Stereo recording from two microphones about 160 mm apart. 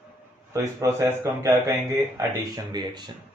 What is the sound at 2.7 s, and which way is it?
Speech, 25° right (ahead or behind).